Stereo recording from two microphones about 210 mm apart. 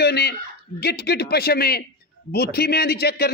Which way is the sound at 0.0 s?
50° left (ahead or behind).